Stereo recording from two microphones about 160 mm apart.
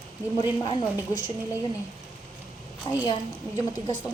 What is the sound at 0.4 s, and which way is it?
Speech, 30° left (ahead or behind).